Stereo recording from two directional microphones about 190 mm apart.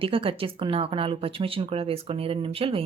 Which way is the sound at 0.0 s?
30° right (ahead or behind).